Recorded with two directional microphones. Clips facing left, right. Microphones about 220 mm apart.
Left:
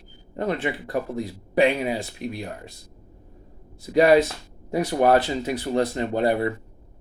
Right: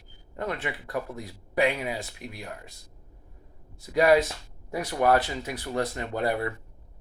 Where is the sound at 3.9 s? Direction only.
25° left (ahead or behind).